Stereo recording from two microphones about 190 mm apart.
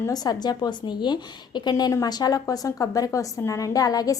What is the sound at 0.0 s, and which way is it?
A woman's voice, 20° left (ahead or behind).